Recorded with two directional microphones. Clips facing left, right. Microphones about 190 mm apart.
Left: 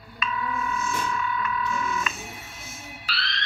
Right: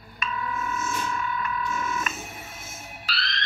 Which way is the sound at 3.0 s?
40° right (ahead or behind).